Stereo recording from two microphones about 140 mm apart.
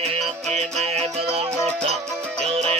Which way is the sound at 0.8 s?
50° right (ahead or behind).